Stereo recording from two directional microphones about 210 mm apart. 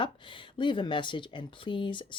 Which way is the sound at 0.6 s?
20° left (ahead or behind).